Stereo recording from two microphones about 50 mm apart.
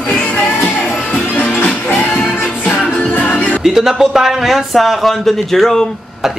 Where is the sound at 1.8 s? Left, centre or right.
Left.